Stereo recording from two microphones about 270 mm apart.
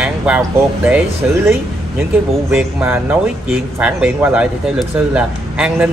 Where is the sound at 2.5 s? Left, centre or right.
Centre.